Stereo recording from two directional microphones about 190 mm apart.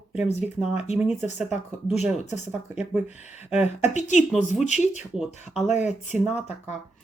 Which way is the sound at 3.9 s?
40° left (ahead or behind).